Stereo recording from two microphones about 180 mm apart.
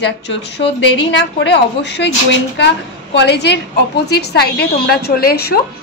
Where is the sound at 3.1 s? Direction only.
70° left (ahead or behind).